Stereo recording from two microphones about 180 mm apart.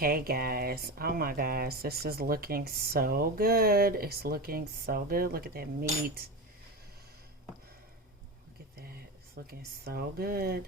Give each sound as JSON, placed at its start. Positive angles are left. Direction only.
{"t": 0.0, "sound": "speech", "side_deg": -55}
{"t": 8.8, "sound": "speech", "side_deg": -60}